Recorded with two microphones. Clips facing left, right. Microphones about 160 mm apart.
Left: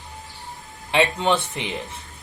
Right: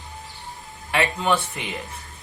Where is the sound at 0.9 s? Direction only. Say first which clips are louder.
Left 2 dB; 25° left (ahead or behind).